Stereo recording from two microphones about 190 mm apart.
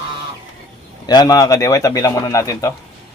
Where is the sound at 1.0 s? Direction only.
20° left (ahead or behind).